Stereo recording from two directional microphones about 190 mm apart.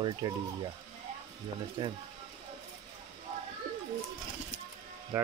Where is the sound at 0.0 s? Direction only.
25° right (ahead or behind).